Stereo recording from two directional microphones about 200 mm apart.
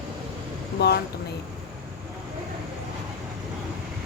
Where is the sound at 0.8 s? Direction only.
55° left (ahead or behind).